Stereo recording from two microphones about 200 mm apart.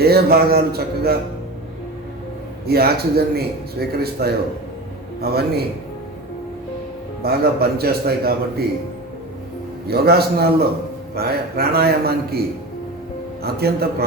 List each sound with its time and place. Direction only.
0.0 s a man's voice: 50° right (ahead or behind)
2.6 s a man's voice: 50° right (ahead or behind)
7.2 s a man's voice: 50° right (ahead or behind)
9.8 s a man's voice: 50° right (ahead or behind)
13.6 s a man's voice: 50° right (ahead or behind)